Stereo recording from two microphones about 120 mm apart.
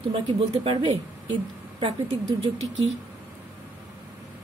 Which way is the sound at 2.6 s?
65° right (ahead or behind).